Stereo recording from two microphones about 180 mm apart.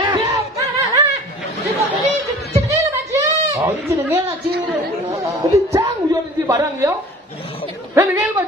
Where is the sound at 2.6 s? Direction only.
15° right (ahead or behind).